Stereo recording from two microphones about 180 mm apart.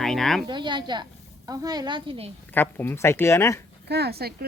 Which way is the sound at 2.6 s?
10° left (ahead or behind).